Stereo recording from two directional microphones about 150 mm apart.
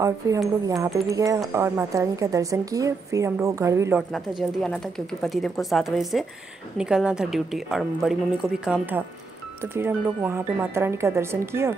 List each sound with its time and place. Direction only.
0.7 s a woman's voice: 20° right (ahead or behind)
4.4 s a woman's voice: 5° left (ahead or behind); by 11.7 s 15° right (ahead or behind)